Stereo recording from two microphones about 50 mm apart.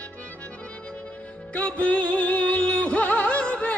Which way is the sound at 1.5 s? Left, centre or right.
Left.